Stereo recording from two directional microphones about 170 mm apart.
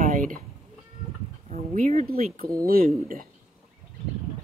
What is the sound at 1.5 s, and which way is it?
Speech, 45° right (ahead or behind).